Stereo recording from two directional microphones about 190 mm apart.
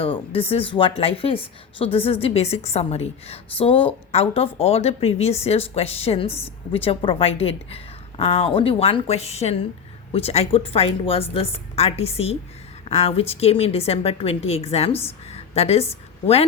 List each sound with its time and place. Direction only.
0.0 s speech: 30° left (ahead or behind)